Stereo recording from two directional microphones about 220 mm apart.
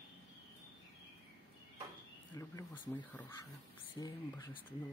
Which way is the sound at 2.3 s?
15° left (ahead or behind).